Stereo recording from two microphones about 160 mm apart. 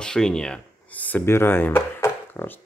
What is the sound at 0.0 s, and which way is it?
Speech, 5° left (ahead or behind).